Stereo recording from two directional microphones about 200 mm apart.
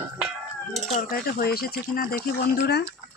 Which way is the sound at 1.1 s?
50° left (ahead or behind).